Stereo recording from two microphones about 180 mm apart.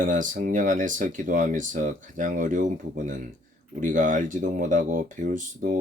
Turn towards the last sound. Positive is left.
turn(degrees=-45)  # may be behind; listen again after turning